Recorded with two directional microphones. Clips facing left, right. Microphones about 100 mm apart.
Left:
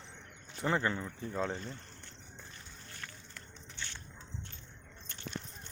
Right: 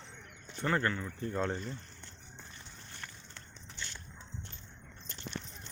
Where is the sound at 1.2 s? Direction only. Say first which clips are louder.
Right 4 dB; centre (ahead or behind).